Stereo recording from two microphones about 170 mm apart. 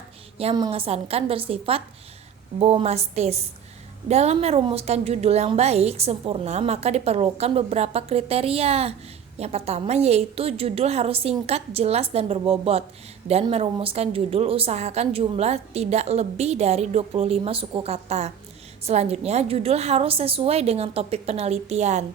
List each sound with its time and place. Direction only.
0.7 s a woman's voice: 35° right (ahead or behind)